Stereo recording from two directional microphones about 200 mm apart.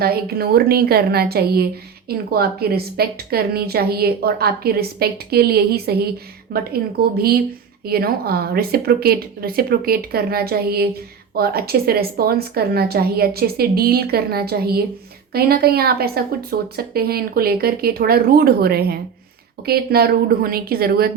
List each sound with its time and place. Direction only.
0.0 s a woman's voice: 50° right (ahead or behind)